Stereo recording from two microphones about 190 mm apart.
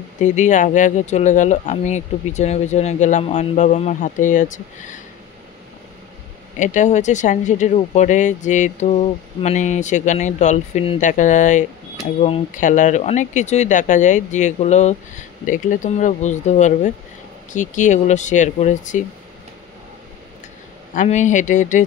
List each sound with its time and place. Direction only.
0.2 s speech: 40° left (ahead or behind)
6.6 s speech: 40° left (ahead or behind)
20.9 s speech: 40° left (ahead or behind)